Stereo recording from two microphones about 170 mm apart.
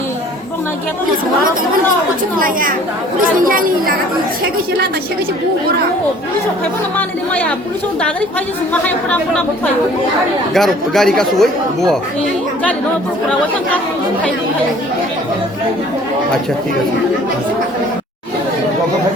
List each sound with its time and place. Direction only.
2.4 s a woman's voice: 55° right (ahead or behind)
6.9 s speech: 10° left (ahead or behind)
8.7 s speech: 10° left (ahead or behind)
10.5 s speech: centre (ahead or behind)